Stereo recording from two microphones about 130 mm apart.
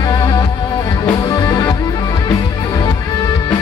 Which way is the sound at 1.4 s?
25° left (ahead or behind).